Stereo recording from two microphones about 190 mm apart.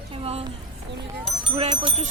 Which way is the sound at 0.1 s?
30° right (ahead or behind).